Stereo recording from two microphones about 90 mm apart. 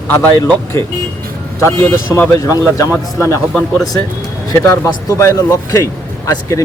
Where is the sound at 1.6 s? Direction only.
30° left (ahead or behind).